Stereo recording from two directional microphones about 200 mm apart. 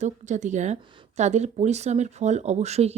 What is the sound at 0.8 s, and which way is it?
A woman's voice, 25° right (ahead or behind).